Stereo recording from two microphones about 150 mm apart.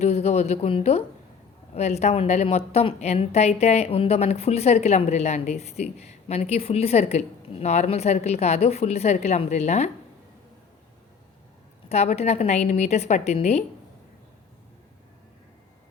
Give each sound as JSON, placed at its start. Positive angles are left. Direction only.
{"t": 0.0, "sound": "a woman's voice", "side_deg": 45}
{"t": 11.9, "sound": "a woman's voice", "side_deg": 45}